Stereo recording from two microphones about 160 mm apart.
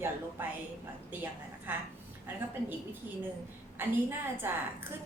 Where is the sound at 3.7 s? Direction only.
15° right (ahead or behind).